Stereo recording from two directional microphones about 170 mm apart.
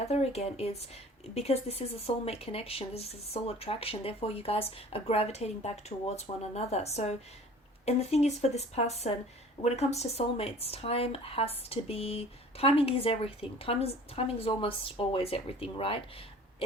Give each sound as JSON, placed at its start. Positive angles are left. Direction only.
{"t": 0.1, "sound": "speech", "side_deg": 40}